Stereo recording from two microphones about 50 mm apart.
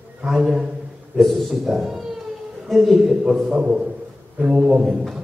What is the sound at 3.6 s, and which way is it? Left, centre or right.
A man's voice, centre.